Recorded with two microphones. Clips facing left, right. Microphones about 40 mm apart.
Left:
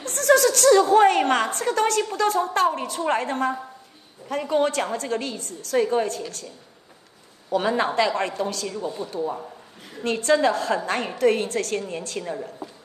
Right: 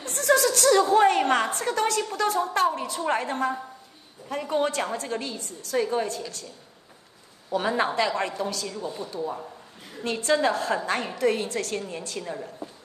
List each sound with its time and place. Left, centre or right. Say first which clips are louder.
0.0 s a sound: left 4 dB; left
1.8 s a woman's voice: left 4 dB; left
7.5 s a woman's voice: left 3 dB; left
8.6 s speech: left 4 dB; left
9.1 s a woman's voice: left 3 dB; left
12.6 s a sound: left 1 dB; left